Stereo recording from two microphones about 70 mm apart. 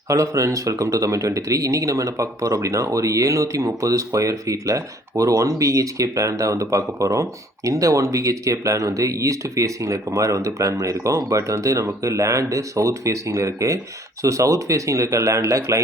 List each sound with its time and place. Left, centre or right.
0.1 s speech: right